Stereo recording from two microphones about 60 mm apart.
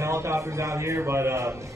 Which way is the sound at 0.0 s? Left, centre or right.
Right.